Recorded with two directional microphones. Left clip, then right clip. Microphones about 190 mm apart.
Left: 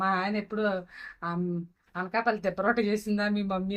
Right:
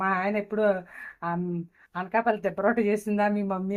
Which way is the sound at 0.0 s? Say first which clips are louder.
Right 2 dB; 40° right (ahead or behind).